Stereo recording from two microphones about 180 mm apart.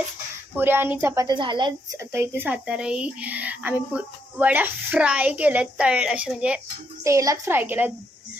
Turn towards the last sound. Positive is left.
turn(degrees=-10)  # may be behind; listen again after turning